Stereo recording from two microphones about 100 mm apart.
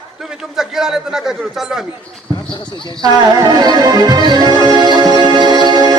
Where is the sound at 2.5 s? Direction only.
50° left (ahead or behind).